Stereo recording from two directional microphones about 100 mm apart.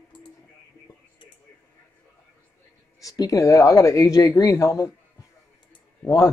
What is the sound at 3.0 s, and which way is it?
Speech, 35° left (ahead or behind).